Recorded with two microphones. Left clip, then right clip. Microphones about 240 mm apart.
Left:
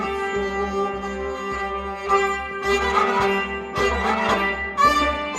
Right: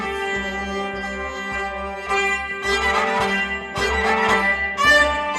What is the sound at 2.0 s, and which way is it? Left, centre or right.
Music, right.